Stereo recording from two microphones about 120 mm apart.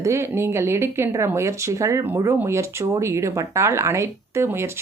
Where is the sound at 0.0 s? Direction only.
25° right (ahead or behind).